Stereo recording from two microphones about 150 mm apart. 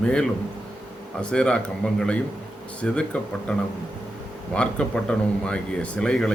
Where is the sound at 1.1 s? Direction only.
5° left (ahead or behind).